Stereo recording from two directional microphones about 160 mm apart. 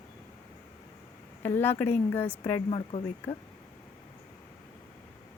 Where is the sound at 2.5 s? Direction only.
35° left (ahead or behind).